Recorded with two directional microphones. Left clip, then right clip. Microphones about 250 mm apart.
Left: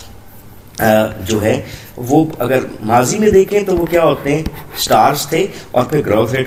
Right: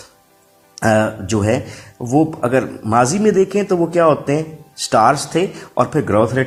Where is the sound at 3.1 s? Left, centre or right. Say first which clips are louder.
Left 4 dB; right.